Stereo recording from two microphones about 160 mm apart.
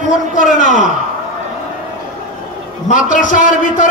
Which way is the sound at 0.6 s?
50° left (ahead or behind).